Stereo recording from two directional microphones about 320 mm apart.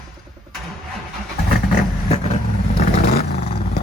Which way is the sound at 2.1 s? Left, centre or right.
Centre.